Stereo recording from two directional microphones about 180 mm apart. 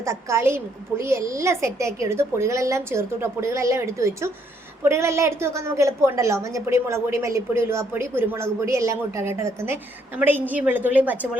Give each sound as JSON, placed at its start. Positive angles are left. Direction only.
{"t": 0.0, "sound": "a woman's voice", "side_deg": -15}